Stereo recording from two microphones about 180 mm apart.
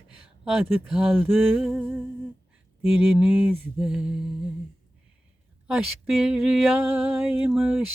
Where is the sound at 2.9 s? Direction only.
5° right (ahead or behind).